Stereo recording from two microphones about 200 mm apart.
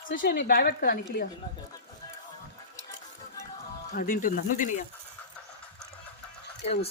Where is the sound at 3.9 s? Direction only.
45° left (ahead or behind).